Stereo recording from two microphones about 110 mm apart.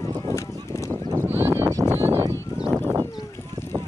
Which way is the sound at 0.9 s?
20° right (ahead or behind).